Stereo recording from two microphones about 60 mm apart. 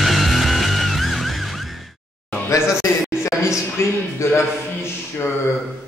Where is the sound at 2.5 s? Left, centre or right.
Left.